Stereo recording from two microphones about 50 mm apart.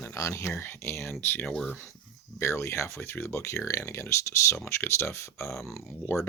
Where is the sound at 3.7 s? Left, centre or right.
Left.